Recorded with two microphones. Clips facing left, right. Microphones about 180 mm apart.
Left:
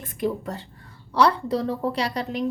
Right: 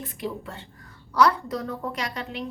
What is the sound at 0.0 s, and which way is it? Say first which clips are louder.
A woman's voice: left 6 dB; 50° left (ahead or behind).